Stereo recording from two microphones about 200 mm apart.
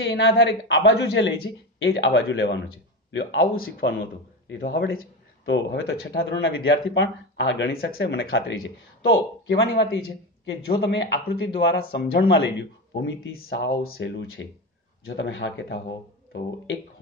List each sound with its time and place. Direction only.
0.0 s speech: 70° left (ahead or behind)
3.5 s speech: 45° left (ahead or behind)
4.5 s a man's voice: 65° left (ahead or behind)